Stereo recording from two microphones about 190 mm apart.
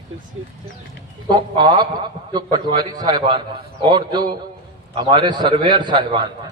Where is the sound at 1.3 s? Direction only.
30° right (ahead or behind).